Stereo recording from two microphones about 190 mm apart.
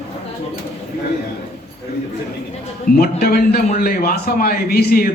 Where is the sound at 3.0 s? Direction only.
55° left (ahead or behind).